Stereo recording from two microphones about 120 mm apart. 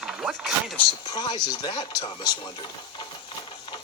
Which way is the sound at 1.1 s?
35° left (ahead or behind).